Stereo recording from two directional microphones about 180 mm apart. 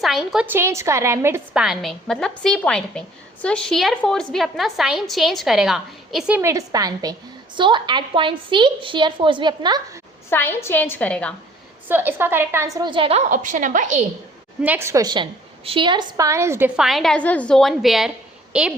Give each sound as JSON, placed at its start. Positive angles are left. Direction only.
{"t": 0.0, "sound": "a woman's voice", "side_deg": 0}
{"t": 1.6, "sound": "a woman's voice", "side_deg": 0}
{"t": 10.2, "sound": "a woman's voice", "side_deg": 10}
{"t": 11.9, "sound": "a woman's voice", "side_deg": -10}
{"t": 14.6, "sound": "a woman's voice", "side_deg": -10}